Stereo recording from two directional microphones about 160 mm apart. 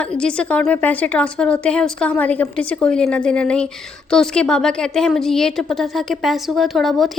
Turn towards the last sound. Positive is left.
turn(degrees=0)  # may be behind; listen again after turning